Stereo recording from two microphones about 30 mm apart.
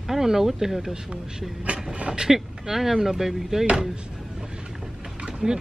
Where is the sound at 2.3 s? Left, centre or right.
Centre.